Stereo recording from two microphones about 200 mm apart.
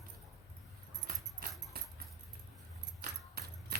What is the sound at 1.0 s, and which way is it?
Dog, 45° right (ahead or behind).